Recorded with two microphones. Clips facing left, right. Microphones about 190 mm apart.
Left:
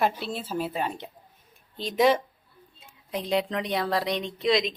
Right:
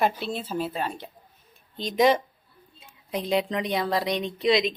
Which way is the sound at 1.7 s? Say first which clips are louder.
Right 1 dB; 5° left (ahead or behind).